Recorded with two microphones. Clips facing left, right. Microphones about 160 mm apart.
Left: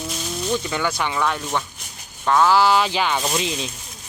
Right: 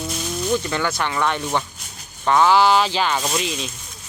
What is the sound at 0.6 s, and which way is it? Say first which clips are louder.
Speech: right 1 dB; 10° left (ahead or behind).